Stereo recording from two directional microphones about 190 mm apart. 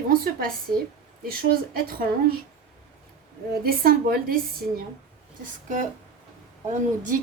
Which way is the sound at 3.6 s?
50° right (ahead or behind).